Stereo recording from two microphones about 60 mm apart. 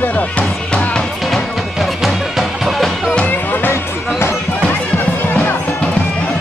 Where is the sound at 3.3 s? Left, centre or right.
Left.